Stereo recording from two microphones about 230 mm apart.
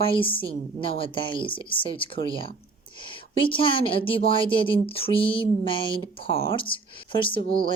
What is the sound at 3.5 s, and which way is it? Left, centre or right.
Speech, left.